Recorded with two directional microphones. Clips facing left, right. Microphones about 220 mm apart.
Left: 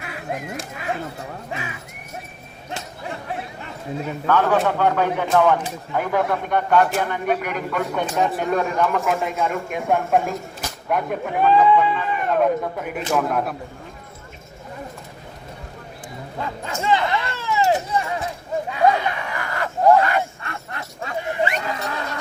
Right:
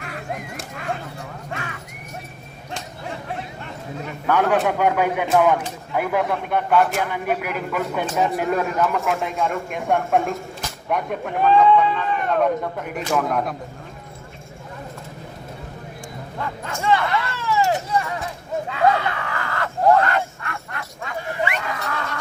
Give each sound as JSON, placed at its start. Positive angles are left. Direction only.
{"t": 0.5, "sound": "speech", "side_deg": 5}
{"t": 4.3, "sound": "speech", "side_deg": -15}
{"t": 16.4, "sound": "speech", "side_deg": 20}
{"t": 18.7, "sound": "crowd", "side_deg": 15}
{"t": 20.4, "sound": "a sound", "side_deg": 25}